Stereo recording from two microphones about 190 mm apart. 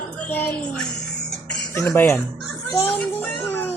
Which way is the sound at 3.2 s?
10° left (ahead or behind).